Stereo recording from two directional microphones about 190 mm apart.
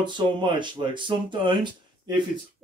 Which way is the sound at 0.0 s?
25° right (ahead or behind).